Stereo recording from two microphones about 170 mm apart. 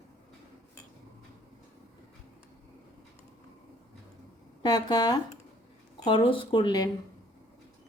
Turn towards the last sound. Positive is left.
turn(degrees=25)  # may be behind; listen again after turning